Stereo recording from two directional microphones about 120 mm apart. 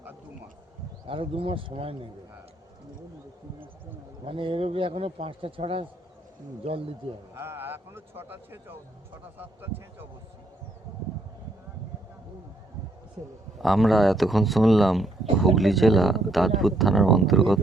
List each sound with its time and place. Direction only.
1.0 s speech: 50° right (ahead or behind)
4.3 s speech: 45° right (ahead or behind)
7.3 s a man's voice: 20° right (ahead or behind)
13.6 s speech: centre (ahead or behind)